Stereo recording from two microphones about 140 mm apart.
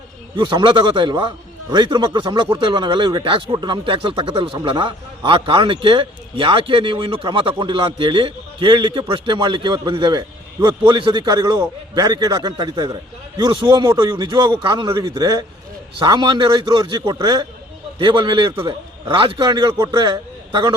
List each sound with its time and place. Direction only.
0.3 s a man's voice: 35° right (ahead or behind)